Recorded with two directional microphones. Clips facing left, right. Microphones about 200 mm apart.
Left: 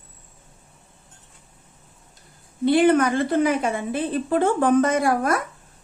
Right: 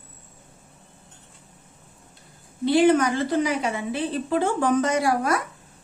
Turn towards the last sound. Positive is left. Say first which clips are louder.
# left 2 dB
turn(degrees=50)  # may be behind; listen again after turning